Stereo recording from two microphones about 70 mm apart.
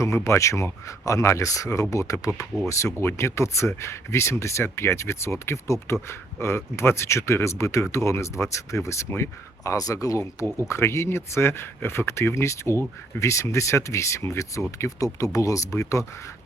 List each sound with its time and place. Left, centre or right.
0.0 s speech: left
9.7 s speech: left
10.7 s speech: left